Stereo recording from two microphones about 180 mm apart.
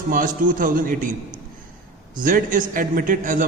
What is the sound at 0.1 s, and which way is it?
A man's voice, 50° right (ahead or behind).